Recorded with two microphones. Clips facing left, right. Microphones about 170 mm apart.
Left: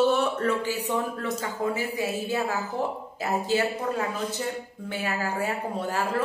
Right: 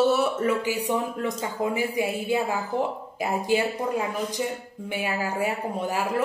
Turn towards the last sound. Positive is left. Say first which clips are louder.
# right 1 dB
turn(degrees=-10)  # may be behind; listen again after turning